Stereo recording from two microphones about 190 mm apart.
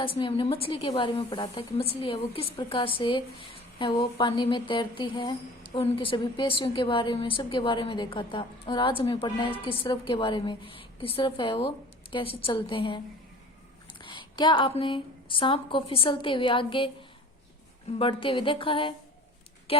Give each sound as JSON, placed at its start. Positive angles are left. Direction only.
{"t": 0.0, "sound": "a woman's voice", "side_deg": 25}
{"t": 14.0, "sound": "a woman's voice", "side_deg": 25}
{"t": 17.9, "sound": "a woman's voice", "side_deg": 30}